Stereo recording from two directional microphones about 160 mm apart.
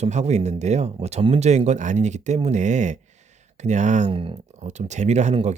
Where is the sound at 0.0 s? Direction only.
45° right (ahead or behind).